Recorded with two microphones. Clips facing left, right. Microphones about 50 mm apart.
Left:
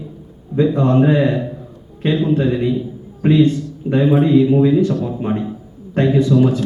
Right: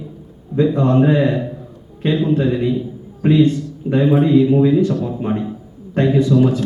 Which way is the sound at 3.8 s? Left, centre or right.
Centre.